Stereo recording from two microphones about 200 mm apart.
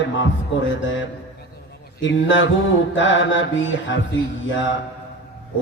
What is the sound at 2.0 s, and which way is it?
Mantra, 70° left (ahead or behind).